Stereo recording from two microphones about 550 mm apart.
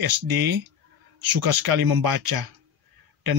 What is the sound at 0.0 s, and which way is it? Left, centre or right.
Speech, right.